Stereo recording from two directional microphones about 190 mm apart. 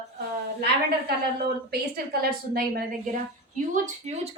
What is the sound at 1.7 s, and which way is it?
A woman's voice, 55° right (ahead or behind).